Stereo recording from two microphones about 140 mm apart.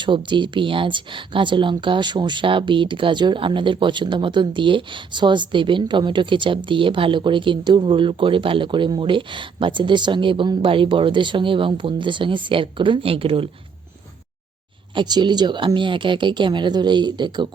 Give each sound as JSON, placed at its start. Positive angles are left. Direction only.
{"t": 0.0, "sound": "speech", "side_deg": -35}
{"t": 14.9, "sound": "speech", "side_deg": -30}